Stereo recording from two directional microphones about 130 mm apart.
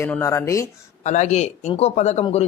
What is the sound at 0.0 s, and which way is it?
Speech, 20° left (ahead or behind).